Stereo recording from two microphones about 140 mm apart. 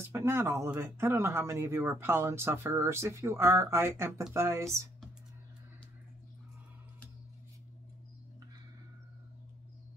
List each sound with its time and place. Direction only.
0.1 s speech: 20° right (ahead or behind)